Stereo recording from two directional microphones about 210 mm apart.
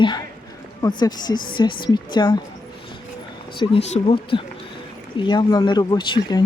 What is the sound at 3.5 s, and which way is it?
Speech, 25° left (ahead or behind).